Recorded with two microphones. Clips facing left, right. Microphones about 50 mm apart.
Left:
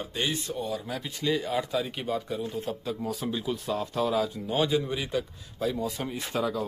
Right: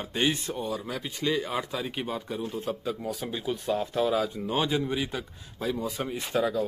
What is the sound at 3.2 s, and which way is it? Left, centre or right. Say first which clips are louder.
Speech: right 2 dB; centre.